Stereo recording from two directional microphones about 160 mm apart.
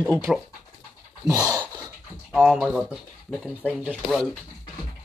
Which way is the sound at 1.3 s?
25° right (ahead or behind).